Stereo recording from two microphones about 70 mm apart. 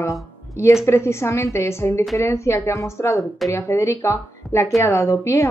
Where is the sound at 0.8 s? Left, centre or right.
Left.